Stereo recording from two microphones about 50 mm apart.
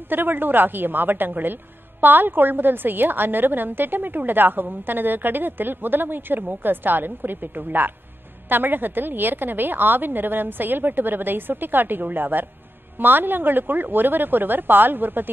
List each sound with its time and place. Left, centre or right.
0.1 s a woman's voice: right